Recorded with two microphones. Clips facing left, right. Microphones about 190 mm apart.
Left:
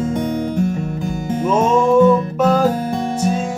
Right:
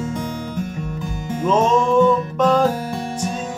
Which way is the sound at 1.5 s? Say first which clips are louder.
Left 2 dB; 10° left (ahead or behind).